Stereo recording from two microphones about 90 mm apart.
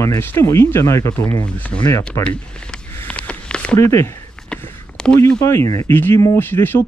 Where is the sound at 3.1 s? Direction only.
10° left (ahead or behind).